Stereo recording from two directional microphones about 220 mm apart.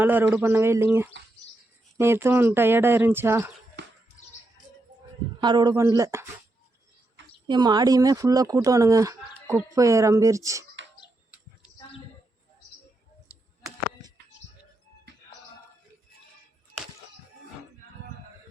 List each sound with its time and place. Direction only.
0.0 s speech: 10° right (ahead or behind)
3.8 s bird: 50° right (ahead or behind)
5.4 s speech: 20° right (ahead or behind)
7.4 s speech: 20° right (ahead or behind)
13.2 s a sound: 15° right (ahead or behind)